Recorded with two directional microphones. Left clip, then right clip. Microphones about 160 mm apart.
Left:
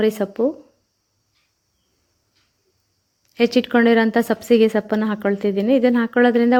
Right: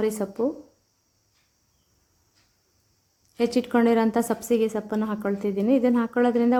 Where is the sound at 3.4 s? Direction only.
15° left (ahead or behind).